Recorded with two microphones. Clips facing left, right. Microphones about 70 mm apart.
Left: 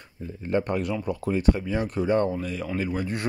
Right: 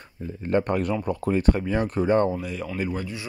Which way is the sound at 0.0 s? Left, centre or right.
Right.